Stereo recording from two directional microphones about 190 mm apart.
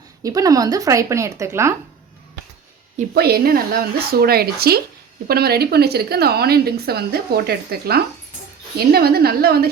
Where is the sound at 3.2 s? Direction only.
55° right (ahead or behind).